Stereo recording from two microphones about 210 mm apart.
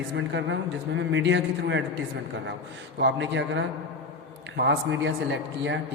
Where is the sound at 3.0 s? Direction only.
60° right (ahead or behind).